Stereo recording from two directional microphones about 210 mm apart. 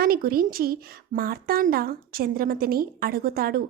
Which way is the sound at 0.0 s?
45° right (ahead or behind).